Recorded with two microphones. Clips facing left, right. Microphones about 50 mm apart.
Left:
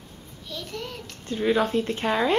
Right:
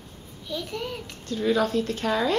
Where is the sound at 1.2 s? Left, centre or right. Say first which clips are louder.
Left 1 dB; left.